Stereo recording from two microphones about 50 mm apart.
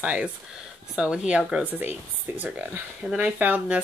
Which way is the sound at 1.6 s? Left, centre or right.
Right.